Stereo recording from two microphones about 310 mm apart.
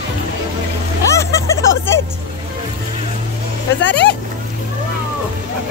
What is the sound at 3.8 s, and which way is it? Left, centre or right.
Speech, left.